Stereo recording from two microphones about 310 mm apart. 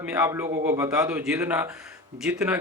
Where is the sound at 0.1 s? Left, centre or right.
Centre.